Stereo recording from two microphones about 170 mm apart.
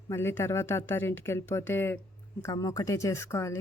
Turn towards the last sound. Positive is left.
turn(degrees=15)  # may be behind; listen again after turning